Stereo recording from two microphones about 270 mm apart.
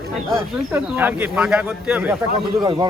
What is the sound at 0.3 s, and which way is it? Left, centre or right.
Speech, centre.